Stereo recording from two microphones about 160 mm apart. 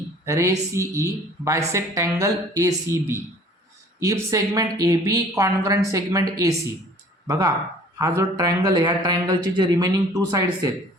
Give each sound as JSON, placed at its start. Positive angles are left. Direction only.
{"t": 0.3, "sound": "a woman's voice", "side_deg": -20}